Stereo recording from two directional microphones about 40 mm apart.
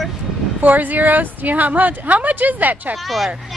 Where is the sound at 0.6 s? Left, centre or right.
Right.